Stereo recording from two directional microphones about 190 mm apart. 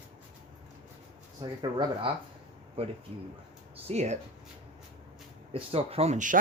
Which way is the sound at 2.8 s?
30° right (ahead or behind).